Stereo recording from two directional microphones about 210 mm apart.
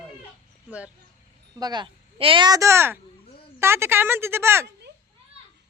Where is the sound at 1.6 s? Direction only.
20° right (ahead or behind).